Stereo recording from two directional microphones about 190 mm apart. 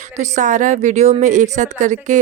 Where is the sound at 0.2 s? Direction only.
40° right (ahead or behind).